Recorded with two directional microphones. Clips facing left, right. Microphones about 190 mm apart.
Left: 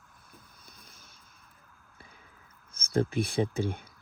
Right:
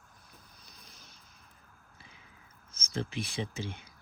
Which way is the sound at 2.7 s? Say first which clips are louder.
Left 9 dB; 55° left (ahead or behind).